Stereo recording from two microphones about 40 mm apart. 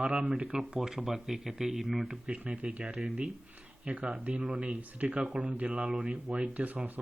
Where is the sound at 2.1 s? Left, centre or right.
Right.